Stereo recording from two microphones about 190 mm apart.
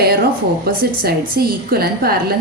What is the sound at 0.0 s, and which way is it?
A woman's voice, 55° right (ahead or behind).